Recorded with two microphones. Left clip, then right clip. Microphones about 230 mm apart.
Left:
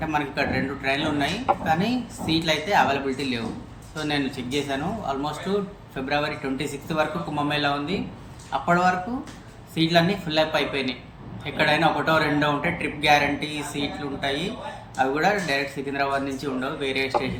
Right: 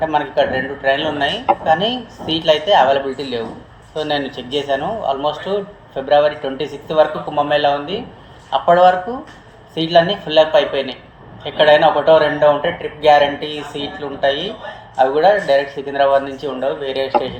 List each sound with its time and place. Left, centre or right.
0.0 s a man's voice: left